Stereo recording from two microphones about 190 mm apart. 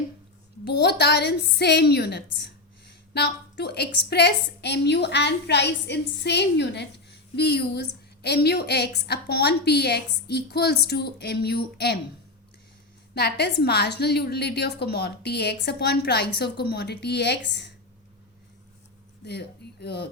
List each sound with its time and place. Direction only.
0.6 s a woman's voice: 60° left (ahead or behind)
13.1 s a woman's voice: 60° left (ahead or behind)
19.2 s a woman's voice: 60° left (ahead or behind)